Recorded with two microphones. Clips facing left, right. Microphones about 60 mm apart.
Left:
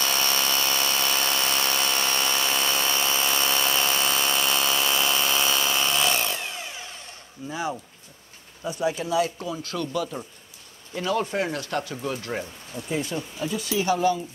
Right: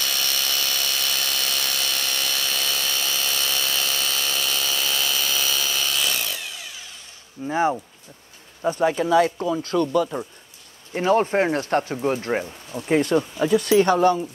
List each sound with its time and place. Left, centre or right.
0.0 s a sound: left
7.4 s speech: right
12.8 s speech: right